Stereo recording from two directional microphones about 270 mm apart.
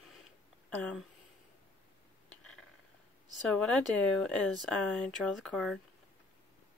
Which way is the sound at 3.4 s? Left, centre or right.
Centre.